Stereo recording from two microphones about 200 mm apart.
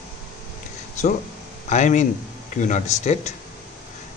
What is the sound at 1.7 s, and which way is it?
Speech, 35° left (ahead or behind).